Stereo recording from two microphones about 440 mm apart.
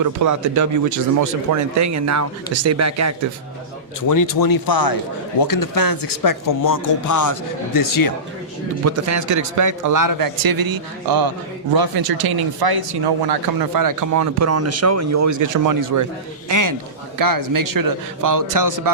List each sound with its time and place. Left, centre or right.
0.0 s a man's voice: right
4.0 s speech: left
8.8 s a man's voice: right